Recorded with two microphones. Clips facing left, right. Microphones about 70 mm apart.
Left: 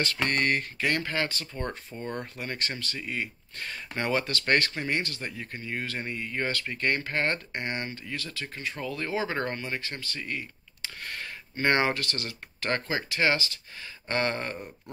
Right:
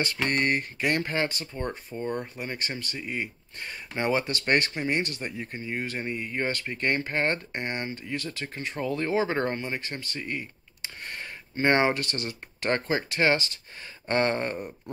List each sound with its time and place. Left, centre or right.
0.0 s speech: right
2.0 s speech: centre; by 14.6 s right